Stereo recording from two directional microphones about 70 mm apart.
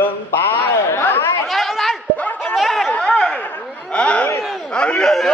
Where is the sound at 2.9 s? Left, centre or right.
Centre.